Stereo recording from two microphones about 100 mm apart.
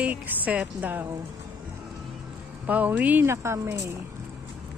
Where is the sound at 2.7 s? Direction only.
15° right (ahead or behind).